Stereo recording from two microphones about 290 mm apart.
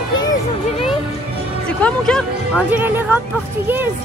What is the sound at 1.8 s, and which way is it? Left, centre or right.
Speech, centre.